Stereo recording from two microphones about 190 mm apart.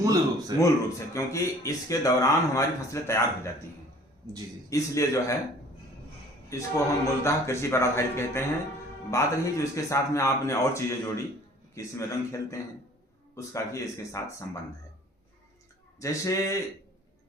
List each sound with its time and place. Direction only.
0.0 s speech: 15° right (ahead or behind)
0.6 s speech: 15° left (ahead or behind)
4.7 s speech: 15° left (ahead or behind)
6.5 s speech: 15° left (ahead or behind)
16.0 s speech: 15° left (ahead or behind)